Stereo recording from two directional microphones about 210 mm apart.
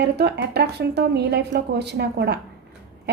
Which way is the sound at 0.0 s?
50° right (ahead or behind).